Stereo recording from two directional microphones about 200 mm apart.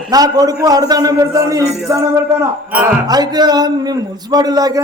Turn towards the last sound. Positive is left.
turn(degrees=-20)  # may be behind; listen again after turning